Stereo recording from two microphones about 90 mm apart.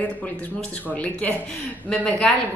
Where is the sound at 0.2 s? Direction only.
15° left (ahead or behind).